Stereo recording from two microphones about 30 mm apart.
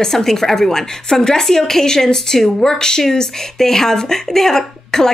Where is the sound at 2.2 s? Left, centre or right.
Centre.